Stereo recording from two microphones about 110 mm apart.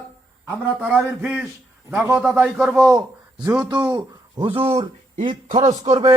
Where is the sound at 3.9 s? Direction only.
50° right (ahead or behind); by 5.2 s 70° right (ahead or behind).